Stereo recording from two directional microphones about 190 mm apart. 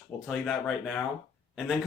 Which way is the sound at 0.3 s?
Centre (ahead or behind).